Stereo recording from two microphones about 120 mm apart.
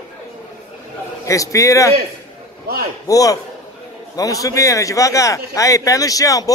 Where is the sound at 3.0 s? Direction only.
30° left (ahead or behind).